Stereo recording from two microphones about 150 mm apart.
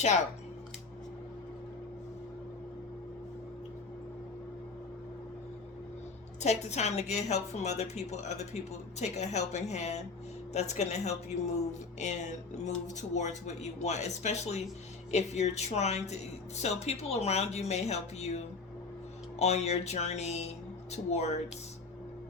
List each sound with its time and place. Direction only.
6.4 s a woman's voice: 50° left (ahead or behind)